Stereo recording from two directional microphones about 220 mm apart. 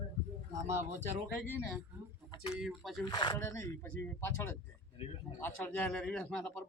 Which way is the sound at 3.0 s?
20° left (ahead or behind).